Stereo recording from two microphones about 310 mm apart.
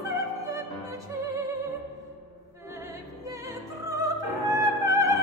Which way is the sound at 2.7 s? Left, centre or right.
Centre.